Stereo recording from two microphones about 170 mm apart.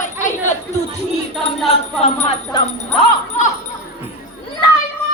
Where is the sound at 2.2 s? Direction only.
35° left (ahead or behind).